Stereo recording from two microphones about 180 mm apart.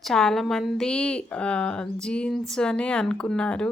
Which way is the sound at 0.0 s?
5° left (ahead or behind).